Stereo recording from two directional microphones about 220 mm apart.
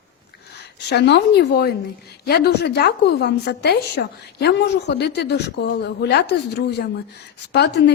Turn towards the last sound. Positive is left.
turn(degrees=50)  # may be behind; listen again after turning